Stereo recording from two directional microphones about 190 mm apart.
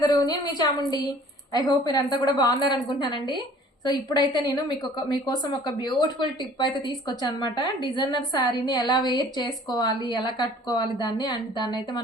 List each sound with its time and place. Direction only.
0.0 s a woman's voice: 20° left (ahead or behind)